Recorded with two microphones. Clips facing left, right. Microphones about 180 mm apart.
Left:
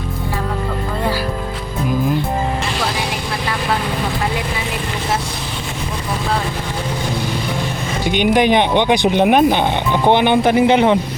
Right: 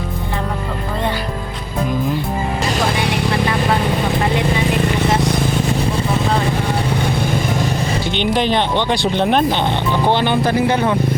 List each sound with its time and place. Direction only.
8.1 s speech: 15° left (ahead or behind)